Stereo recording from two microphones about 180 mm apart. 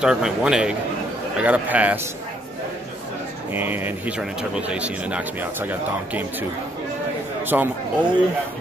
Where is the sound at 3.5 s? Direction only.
10° right (ahead or behind).